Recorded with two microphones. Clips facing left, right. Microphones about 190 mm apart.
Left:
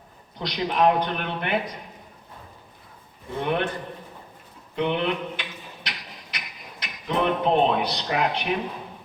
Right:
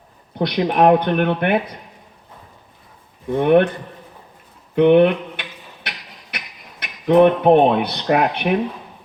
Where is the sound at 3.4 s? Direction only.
55° right (ahead or behind).